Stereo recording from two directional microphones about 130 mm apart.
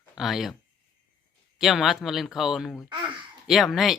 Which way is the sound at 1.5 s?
Centre (ahead or behind).